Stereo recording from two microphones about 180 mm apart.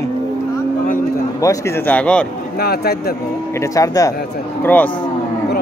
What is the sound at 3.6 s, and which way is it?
Speech, 20° left (ahead or behind).